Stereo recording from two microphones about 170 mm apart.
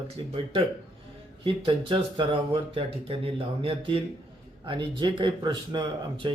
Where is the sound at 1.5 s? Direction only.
30° right (ahead or behind).